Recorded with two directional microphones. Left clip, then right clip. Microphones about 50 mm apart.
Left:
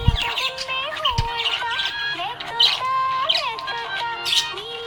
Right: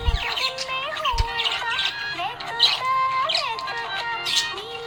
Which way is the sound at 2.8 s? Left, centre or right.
Left.